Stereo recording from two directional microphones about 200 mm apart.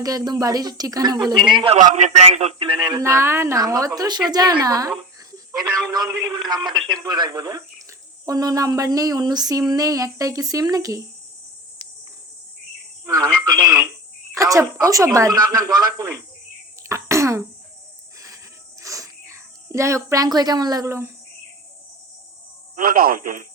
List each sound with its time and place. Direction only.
0.0 s speech: 20° right (ahead or behind)
2.8 s speech: 15° right (ahead or behind)
13.1 s speech: 20° right (ahead or behind)
16.9 s cough: 15° right (ahead or behind)
18.8 s a sound: 15° right (ahead or behind)
22.7 s speech: 45° right (ahead or behind)